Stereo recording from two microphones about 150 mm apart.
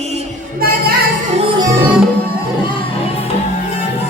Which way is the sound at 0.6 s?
85° right.